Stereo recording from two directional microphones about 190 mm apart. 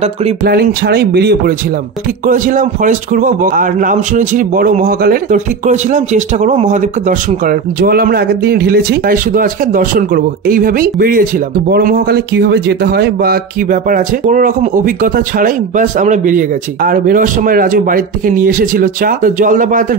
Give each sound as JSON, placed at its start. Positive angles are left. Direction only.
{"t": 0.5, "sound": "speech", "side_deg": -55}
{"t": 2.2, "sound": "a man's voice", "side_deg": -45}